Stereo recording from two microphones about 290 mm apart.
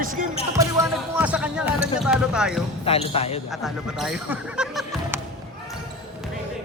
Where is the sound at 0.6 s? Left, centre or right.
Centre.